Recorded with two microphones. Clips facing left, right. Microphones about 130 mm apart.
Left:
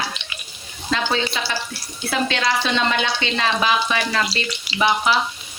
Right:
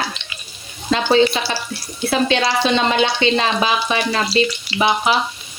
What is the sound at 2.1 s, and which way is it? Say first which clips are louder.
Speech: right 4 dB; 20° right (ahead or behind).